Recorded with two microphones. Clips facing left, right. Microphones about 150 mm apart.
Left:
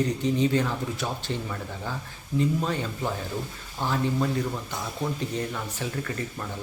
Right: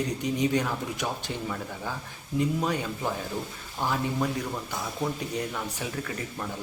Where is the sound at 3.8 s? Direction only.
10° right (ahead or behind).